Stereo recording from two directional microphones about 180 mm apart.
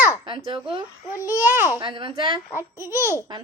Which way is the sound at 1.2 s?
15° right (ahead or behind).